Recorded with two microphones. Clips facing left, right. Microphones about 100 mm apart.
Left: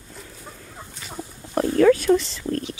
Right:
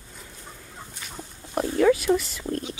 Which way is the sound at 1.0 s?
Centre (ahead or behind).